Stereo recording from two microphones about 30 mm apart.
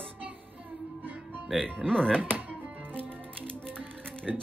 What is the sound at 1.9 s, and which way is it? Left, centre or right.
Speech, left.